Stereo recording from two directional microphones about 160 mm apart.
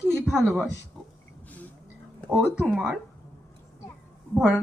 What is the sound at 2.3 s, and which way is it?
Speech, 10° right (ahead or behind).